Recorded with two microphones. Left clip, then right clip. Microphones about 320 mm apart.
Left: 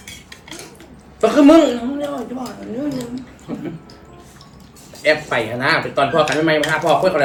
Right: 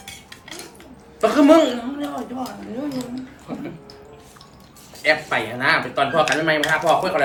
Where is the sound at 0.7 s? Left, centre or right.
Centre.